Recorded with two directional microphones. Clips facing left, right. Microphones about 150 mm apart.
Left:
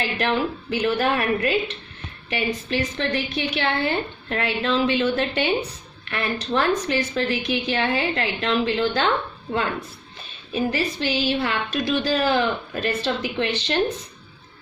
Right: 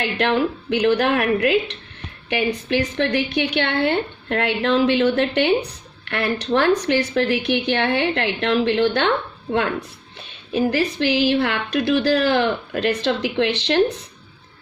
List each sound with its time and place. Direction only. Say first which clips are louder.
0.0 s speech: right 3 dB; 70° right (ahead or behind)